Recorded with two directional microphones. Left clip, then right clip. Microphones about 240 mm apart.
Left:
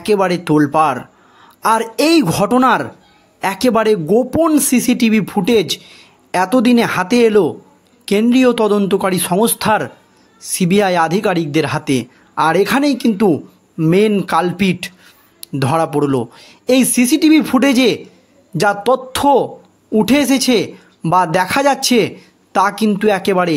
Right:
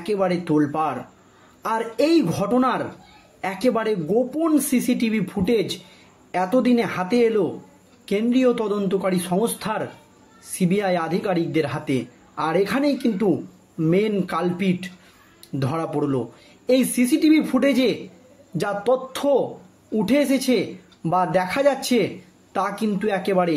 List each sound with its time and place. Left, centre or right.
0.0 s speech: left